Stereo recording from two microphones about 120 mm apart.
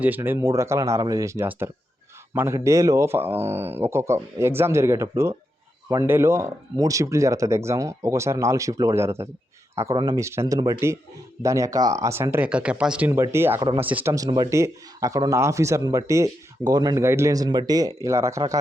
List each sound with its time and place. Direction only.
0.0 s speech: 15° right (ahead or behind)
9.9 s speech: 35° right (ahead or behind); by 13.1 s 10° right (ahead or behind)
13.1 s speech: 20° right (ahead or behind)
14.1 s speech: 30° right (ahead or behind)